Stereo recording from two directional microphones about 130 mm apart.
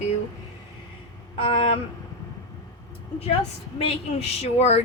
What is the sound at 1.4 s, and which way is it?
Speech, 40° left (ahead or behind).